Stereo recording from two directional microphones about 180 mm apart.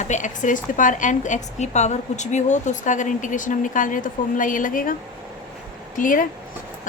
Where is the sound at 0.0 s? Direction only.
45° left (ahead or behind).